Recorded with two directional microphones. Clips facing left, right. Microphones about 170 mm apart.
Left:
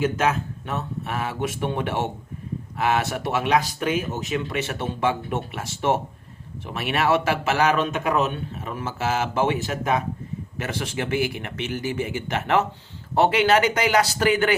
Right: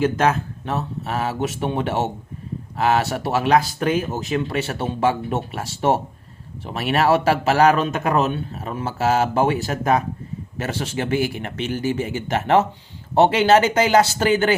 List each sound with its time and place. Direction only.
0.0 s a man's voice: 35° right (ahead or behind)